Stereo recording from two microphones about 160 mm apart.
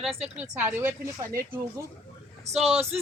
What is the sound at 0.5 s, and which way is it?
Speech, 10° right (ahead or behind).